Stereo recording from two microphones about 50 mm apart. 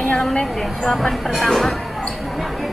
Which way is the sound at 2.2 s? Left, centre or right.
Centre.